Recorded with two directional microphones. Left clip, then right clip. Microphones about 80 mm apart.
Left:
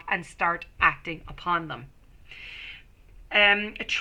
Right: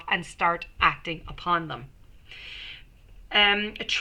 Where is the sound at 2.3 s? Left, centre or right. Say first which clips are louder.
Even; left.